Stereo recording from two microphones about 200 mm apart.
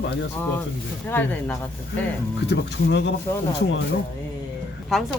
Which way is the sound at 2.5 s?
60° left (ahead or behind).